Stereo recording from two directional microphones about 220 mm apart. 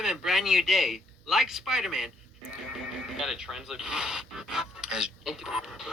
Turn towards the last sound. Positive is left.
turn(degrees=0)  # may be behind; listen again after turning